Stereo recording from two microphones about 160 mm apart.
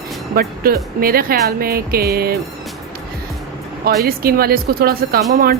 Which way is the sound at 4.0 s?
70° right (ahead or behind).